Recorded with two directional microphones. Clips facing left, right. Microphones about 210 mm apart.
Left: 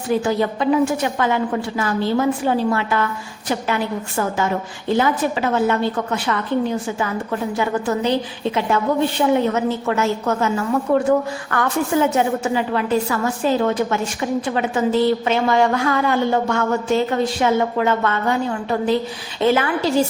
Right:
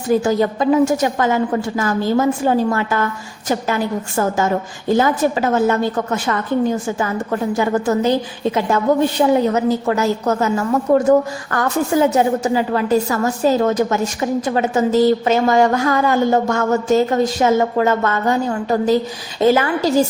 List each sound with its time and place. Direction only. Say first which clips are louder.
0.1 s a woman's voice: right 3 dB; 40° right (ahead or behind)
4.9 s a woman's voice: right 3 dB; 45° right (ahead or behind)